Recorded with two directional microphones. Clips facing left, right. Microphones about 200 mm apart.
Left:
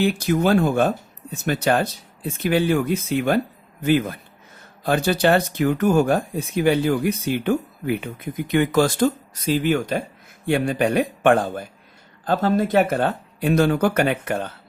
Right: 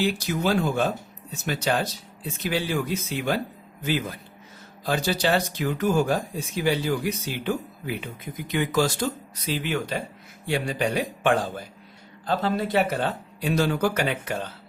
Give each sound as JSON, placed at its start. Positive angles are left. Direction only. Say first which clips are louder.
{"t": 0.0, "sound": "speech", "louder": "left 5 dB", "side_deg": 55}